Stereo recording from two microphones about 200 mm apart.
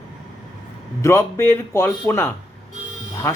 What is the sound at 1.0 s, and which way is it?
Speech, 10° left (ahead or behind).